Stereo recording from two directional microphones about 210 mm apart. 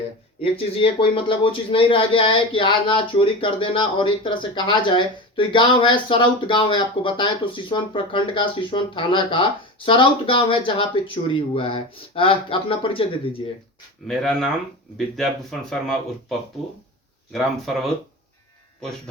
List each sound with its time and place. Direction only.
0.4 s speech: 25° left (ahead or behind)
14.1 s speech: centre (ahead or behind)